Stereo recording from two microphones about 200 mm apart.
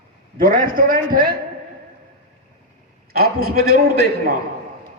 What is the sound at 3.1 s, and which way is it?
A man's voice, 50° right (ahead or behind).